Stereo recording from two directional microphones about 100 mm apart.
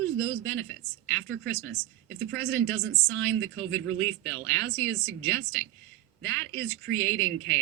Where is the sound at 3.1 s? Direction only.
15° left (ahead or behind).